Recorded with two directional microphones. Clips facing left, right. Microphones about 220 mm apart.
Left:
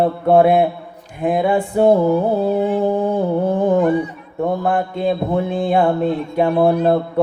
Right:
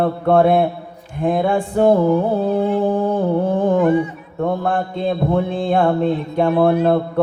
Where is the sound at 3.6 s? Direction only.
5° left (ahead or behind).